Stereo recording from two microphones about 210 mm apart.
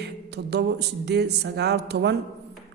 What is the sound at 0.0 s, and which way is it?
A man's voice, 50° right (ahead or behind).